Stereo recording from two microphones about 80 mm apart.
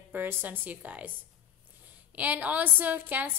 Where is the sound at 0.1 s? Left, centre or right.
Right.